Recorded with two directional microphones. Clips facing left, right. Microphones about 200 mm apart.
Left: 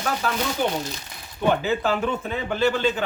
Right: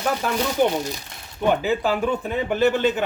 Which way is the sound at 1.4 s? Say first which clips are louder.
Right 1 dB; 15° right (ahead or behind).